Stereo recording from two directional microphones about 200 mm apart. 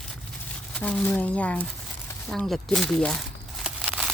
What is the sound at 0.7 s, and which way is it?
Speech, 5° left (ahead or behind).